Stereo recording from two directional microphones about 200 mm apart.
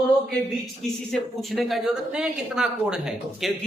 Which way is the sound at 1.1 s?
Centre (ahead or behind).